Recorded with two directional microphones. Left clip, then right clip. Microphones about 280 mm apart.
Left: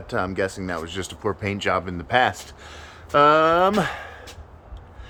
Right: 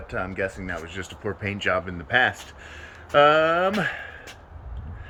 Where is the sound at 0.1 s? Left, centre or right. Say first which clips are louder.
Left 4 dB; centre.